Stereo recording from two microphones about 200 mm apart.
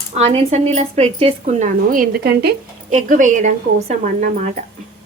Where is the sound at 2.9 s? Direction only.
40° right (ahead or behind).